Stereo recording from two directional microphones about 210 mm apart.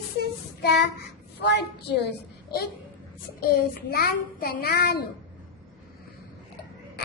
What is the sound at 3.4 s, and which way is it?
A child's voice, 45° left (ahead or behind).